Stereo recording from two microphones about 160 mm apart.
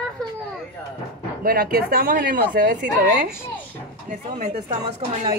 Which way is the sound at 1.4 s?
65° right (ahead or behind).